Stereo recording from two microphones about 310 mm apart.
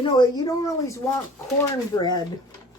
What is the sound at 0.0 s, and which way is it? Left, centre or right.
A woman's voice, centre.